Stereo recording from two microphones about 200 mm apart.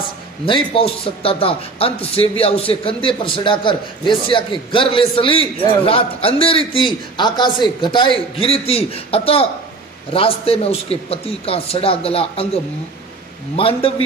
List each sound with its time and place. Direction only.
0.4 s a man's voice: 25° left (ahead or behind)
13.6 s a man's voice: 30° left (ahead or behind)